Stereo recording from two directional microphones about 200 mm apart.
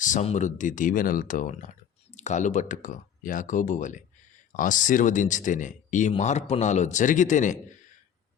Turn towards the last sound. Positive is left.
turn(degrees=40)  # may be behind; listen again after turning